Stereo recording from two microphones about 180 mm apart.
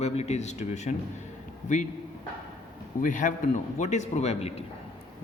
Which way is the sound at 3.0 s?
45° left (ahead or behind).